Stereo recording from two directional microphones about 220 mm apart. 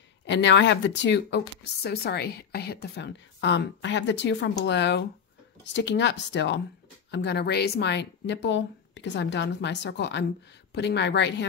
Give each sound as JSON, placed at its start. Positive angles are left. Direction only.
{"t": 0.3, "sound": "speech", "side_deg": 55}